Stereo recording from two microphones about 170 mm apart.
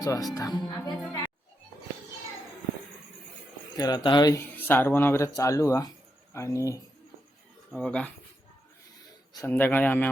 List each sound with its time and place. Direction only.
0.0 s speech: 20° left (ahead or behind)
0.6 s speech: 5° left (ahead or behind)
3.8 s speech: 25° left (ahead or behind)
4.5 s speech: 10° left (ahead or behind)
7.7 s speech: 5° left (ahead or behind)
9.5 s speech: 10° left (ahead or behind)